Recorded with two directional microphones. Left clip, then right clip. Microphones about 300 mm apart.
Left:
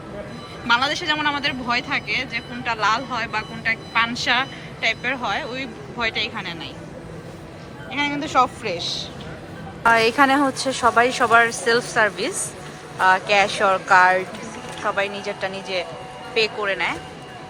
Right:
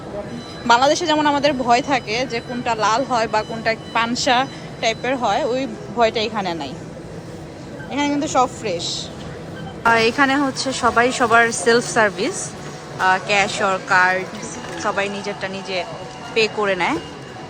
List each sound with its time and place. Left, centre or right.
0.7 s speech: centre
7.9 s a woman's voice: centre